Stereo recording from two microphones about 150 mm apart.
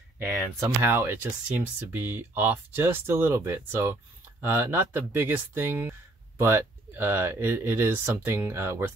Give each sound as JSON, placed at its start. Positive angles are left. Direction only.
{"t": 0.6, "sound": "speech", "side_deg": -20}